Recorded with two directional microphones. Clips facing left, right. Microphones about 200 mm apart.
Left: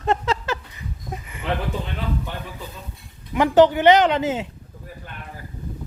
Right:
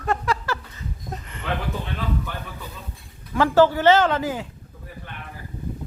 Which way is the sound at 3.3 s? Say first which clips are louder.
Left 2 dB; 20° left (ahead or behind).